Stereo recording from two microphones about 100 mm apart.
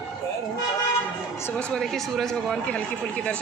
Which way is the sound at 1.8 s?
Centre (ahead or behind).